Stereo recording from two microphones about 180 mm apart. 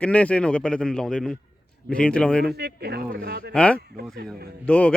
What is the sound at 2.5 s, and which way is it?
Speech, 65° right (ahead or behind).